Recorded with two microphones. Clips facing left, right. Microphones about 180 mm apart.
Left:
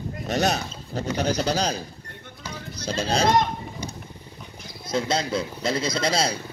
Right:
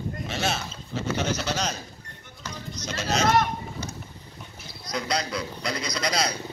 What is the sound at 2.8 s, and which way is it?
Speech, 30° left (ahead or behind).